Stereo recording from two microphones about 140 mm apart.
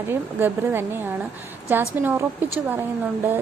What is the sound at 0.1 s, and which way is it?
Speech, 15° right (ahead or behind).